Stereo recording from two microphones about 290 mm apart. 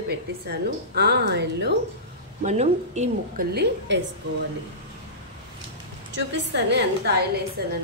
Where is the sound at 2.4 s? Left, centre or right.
Right.